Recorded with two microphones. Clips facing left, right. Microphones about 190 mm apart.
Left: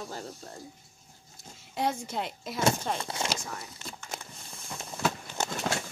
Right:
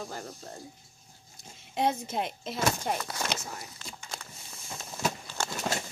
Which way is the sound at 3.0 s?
25° left (ahead or behind).